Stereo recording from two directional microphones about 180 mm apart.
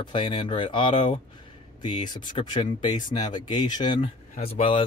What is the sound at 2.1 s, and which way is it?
Speech, 45° left (ahead or behind).